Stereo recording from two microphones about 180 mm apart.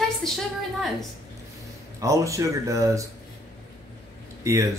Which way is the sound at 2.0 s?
15° right (ahead or behind).